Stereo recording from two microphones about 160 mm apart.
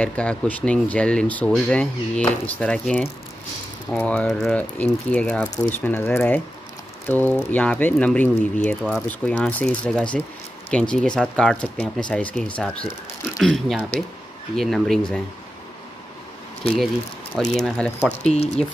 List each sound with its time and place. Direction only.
0.0 s speech: 5° left (ahead or behind)
16.6 s speech: centre (ahead or behind)
18.2 s speech: 40° left (ahead or behind)